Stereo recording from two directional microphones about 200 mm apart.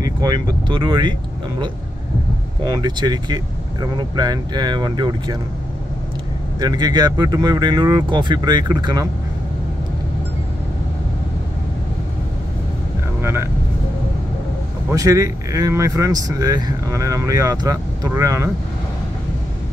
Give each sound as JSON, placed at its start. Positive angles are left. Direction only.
{"t": 0.0, "sound": "speech", "side_deg": -20}
{"t": 2.6, "sound": "speech", "side_deg": -20}
{"t": 6.6, "sound": "speech", "side_deg": -20}
{"t": 13.2, "sound": "vehicle", "side_deg": -10}
{"t": 14.9, "sound": "speech", "side_deg": -15}